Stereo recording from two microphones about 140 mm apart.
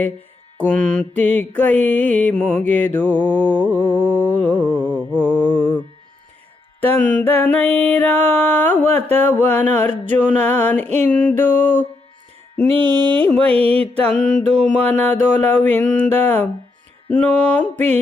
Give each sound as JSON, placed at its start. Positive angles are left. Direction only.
{"t": 0.5, "sound": "mantra", "side_deg": 10}
{"t": 6.8, "sound": "mantra", "side_deg": 10}
{"t": 12.8, "sound": "mantra", "side_deg": -35}
{"t": 14.1, "sound": "mantra", "side_deg": 5}